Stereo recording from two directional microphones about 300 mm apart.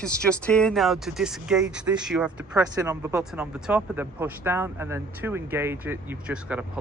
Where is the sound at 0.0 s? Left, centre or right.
Centre.